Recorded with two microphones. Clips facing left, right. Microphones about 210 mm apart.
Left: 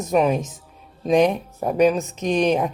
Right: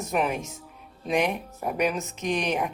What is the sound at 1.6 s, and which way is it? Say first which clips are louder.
Speech: left 9 dB; 35° left (ahead or behind).